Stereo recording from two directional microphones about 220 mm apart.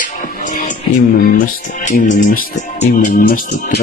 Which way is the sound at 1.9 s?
35° left (ahead or behind).